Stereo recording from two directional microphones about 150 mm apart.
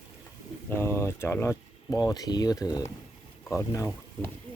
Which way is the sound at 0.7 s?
15° left (ahead or behind).